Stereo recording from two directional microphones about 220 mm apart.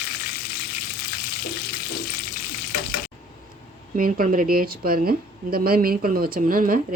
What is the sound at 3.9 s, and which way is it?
A woman's voice, 40° right (ahead or behind).